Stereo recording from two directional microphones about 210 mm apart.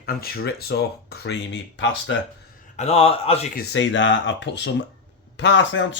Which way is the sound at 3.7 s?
60° left (ahead or behind).